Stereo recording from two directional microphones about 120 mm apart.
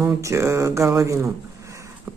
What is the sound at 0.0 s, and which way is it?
Speech, 25° right (ahead or behind).